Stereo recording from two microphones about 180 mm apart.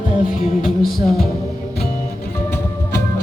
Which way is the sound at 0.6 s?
Centre (ahead or behind).